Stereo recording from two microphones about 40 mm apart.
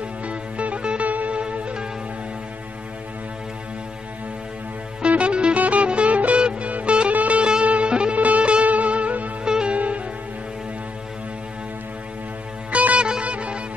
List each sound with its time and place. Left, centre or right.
0.3 s music: right
1.4 s music: right
5.0 s music: right
9.4 s music: right
9.8 s music: right
12.7 s music: right